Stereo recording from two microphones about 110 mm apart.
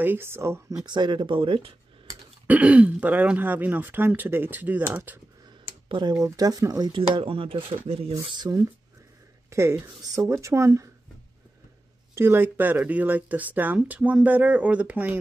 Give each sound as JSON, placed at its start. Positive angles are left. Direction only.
{"t": 0.0, "sound": "speech", "side_deg": -20}
{"t": 0.8, "sound": "speech", "side_deg": -45}
{"t": 2.4, "sound": "speech", "side_deg": -15}
{"t": 5.9, "sound": "speech", "side_deg": -45}
{"t": 6.1, "sound": "speech", "side_deg": -35}
{"t": 6.9, "sound": "speech", "side_deg": -50}
{"t": 9.5, "sound": "speech", "side_deg": -25}
{"t": 12.2, "sound": "speech", "side_deg": -20}